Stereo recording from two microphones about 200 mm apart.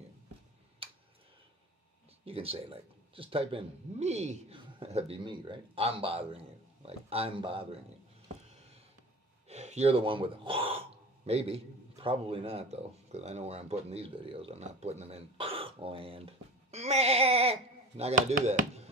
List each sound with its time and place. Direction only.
0.8 s tick: 25° right (ahead or behind)
2.2 s speech: 30° right (ahead or behind)
9.5 s a man's voice: 35° right (ahead or behind)